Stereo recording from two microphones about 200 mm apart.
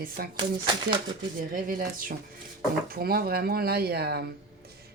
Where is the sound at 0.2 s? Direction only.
50° right (ahead or behind).